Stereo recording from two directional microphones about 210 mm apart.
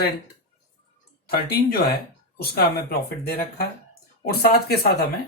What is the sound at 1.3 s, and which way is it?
Speech, 50° left (ahead or behind).